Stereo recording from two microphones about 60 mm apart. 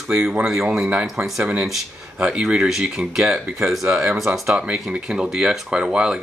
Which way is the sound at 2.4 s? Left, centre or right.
Centre.